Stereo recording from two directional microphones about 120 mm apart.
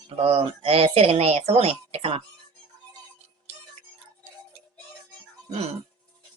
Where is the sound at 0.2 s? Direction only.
55° right (ahead or behind).